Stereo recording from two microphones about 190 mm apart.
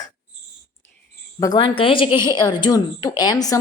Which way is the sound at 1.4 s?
20° left (ahead or behind).